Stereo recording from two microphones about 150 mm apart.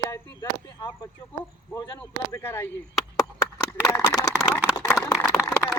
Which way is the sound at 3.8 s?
25° left (ahead or behind).